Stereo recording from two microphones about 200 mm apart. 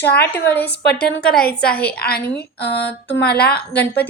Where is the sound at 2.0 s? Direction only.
50° left (ahead or behind).